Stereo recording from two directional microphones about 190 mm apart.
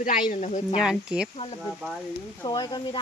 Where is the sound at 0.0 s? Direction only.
45° left (ahead or behind).